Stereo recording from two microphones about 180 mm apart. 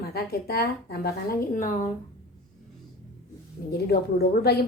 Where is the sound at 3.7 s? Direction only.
60° left (ahead or behind).